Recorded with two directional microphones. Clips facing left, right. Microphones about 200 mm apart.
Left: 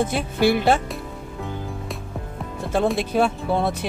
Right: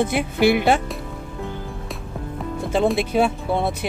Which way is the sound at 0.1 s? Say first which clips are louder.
Right 2 dB; 15° right (ahead or behind).